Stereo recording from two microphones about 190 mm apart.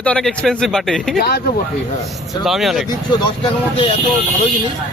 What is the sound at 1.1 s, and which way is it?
Speech, 55° left (ahead or behind).